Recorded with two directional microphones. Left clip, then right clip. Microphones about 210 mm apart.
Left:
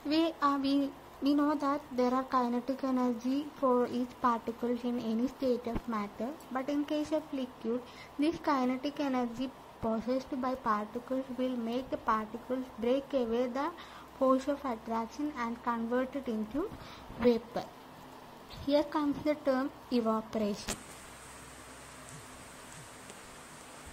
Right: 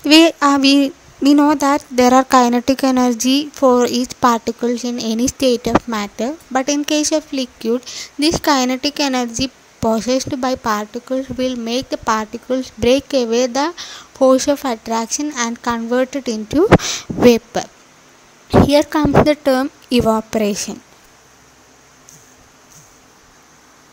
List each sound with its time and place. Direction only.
0.1 s a woman's voice: 50° right (ahead or behind)
18.7 s a woman's voice: 50° right (ahead or behind)